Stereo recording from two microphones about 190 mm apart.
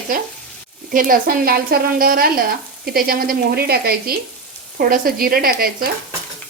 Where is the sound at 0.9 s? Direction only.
45° right (ahead or behind).